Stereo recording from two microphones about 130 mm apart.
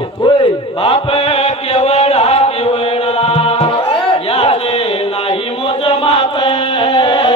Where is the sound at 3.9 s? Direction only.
45° left (ahead or behind).